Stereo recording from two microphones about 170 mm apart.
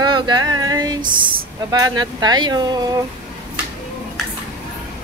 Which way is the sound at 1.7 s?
25° right (ahead or behind).